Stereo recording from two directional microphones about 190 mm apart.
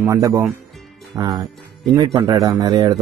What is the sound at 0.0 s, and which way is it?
Speech, 15° right (ahead or behind).